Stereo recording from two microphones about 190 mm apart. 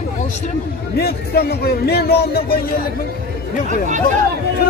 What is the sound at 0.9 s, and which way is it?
Speech, 55° left (ahead or behind).